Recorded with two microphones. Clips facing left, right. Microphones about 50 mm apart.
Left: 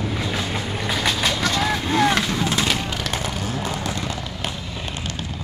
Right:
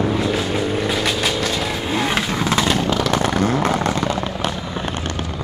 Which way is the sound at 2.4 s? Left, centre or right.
Right.